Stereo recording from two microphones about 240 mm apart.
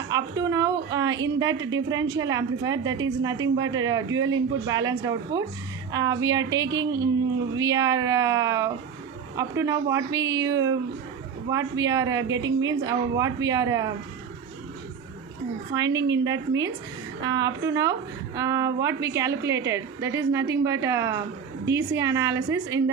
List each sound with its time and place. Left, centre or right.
0.1 s a woman's voice: centre
15.7 s a woman's voice: centre
17.2 s a woman's voice: centre